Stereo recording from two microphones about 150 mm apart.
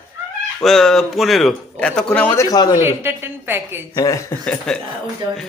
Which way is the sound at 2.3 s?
20° left (ahead or behind).